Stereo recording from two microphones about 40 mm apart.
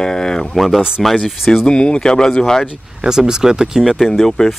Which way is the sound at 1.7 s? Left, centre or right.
Left.